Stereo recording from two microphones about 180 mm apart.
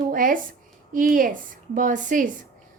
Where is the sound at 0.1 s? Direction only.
50° right (ahead or behind).